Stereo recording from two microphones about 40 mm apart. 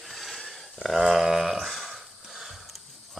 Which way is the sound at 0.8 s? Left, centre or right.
Centre.